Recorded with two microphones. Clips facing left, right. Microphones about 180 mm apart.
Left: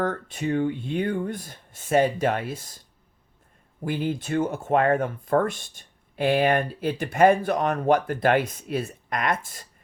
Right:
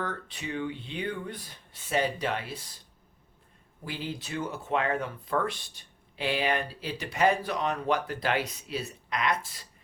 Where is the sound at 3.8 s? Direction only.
50° left (ahead or behind).